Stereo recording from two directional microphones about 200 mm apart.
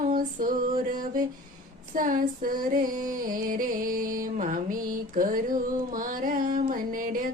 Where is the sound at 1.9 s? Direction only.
40° right (ahead or behind).